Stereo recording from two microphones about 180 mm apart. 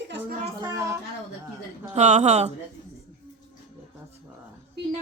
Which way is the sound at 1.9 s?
40° right (ahead or behind).